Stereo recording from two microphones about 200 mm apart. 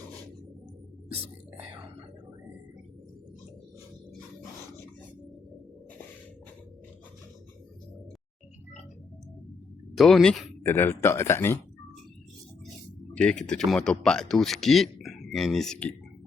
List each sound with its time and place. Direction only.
1.1 s whispering: 30° right (ahead or behind)
9.9 s speech: centre (ahead or behind)
10.6 s speech: 10° left (ahead or behind)
13.1 s speech: 5° left (ahead or behind)